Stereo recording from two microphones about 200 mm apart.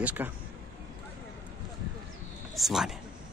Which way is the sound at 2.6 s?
Centre (ahead or behind).